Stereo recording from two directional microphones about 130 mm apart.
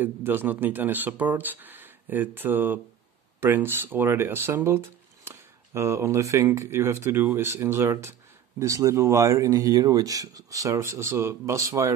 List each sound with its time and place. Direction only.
0.0 s speech: 15° right (ahead or behind)